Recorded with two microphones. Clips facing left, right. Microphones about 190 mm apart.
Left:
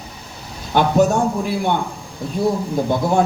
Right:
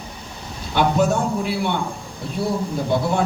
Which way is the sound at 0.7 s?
45° left (ahead or behind).